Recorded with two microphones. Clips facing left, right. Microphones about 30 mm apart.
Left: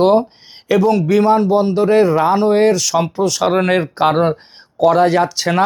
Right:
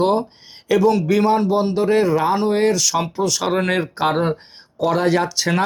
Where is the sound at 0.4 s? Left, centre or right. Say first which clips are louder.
Left 3 dB; centre.